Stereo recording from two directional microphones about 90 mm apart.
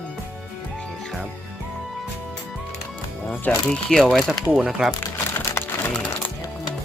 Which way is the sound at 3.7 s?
5° left (ahead or behind).